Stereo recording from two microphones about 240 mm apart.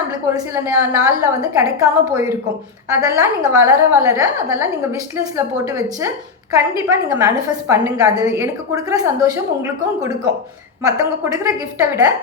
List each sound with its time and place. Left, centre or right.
0.3 s a woman's voice: centre
10.8 s a woman's voice: centre